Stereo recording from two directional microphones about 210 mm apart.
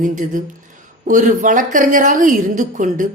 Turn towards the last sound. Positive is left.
turn(degrees=-40)  # may be behind; listen again after turning